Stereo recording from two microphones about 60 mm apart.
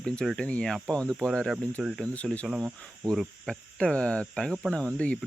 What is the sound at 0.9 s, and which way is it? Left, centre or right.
Speech, centre.